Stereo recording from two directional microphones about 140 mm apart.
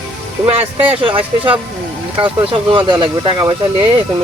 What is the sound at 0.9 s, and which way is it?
Speech, 40° right (ahead or behind).